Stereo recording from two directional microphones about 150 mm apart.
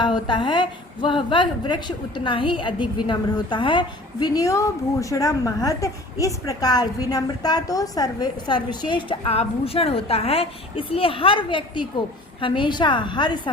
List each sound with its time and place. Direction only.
0.0 s a woman's voice: 30° left (ahead or behind)